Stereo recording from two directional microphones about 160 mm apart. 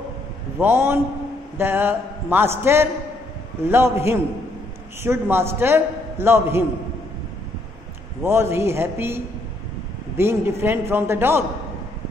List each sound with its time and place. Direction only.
0.6 s a man's voice: 15° right (ahead or behind)
8.2 s a man's voice: 15° right (ahead or behind)